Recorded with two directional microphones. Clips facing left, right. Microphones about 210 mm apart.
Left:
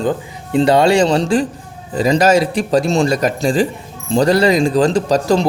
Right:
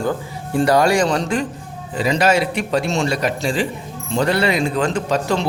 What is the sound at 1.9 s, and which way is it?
Speech, 40° left (ahead or behind).